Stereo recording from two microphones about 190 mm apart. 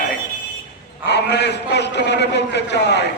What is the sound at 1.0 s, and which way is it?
A man's voice, 60° left (ahead or behind).